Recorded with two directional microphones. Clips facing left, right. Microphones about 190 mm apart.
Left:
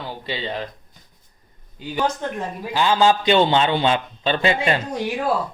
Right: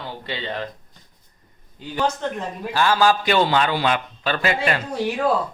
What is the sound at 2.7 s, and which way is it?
A man's voice, 20° left (ahead or behind).